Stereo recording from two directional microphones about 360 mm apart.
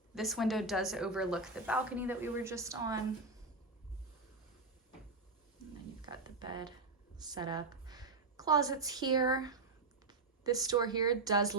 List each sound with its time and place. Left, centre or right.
0.1 s a woman's voice: centre
6.0 s a sound: centre
7.2 s a woman's voice: centre